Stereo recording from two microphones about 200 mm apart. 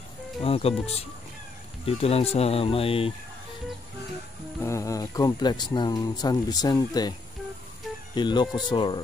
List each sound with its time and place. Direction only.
0.4 s speech: 30° left (ahead or behind)
4.6 s speech: 15° left (ahead or behind)